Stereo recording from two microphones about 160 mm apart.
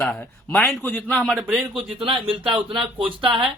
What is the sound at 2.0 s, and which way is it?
Speech, 35° right (ahead or behind).